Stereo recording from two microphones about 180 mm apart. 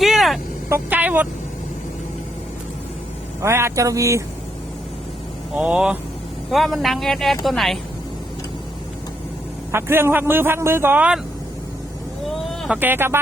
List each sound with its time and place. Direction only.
0.0 s vehicle: centre (ahead or behind)
0.7 s speech: 10° right (ahead or behind)
3.4 s speech: 15° right (ahead or behind)
5.5 s speech: 5° right (ahead or behind)
9.7 s speech: 15° right (ahead or behind)
12.5 s speech: 5° right (ahead or behind)